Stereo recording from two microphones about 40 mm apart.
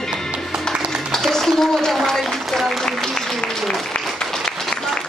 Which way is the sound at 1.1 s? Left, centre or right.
Centre.